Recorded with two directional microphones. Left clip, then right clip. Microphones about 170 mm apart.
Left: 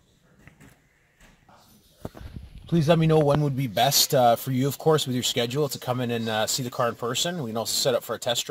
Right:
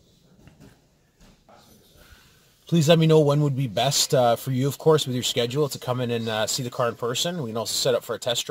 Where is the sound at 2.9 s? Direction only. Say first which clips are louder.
Right 2 dB; 20° right (ahead or behind).